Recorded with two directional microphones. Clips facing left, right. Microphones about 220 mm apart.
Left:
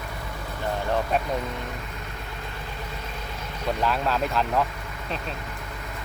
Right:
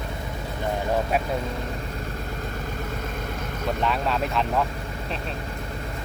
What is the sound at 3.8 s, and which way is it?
Speech, centre (ahead or behind).